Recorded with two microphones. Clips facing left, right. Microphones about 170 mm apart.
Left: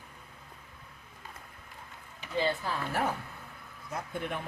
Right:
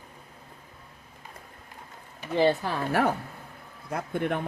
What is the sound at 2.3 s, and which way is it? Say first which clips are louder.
Speech: right 7 dB; 70° right (ahead or behind).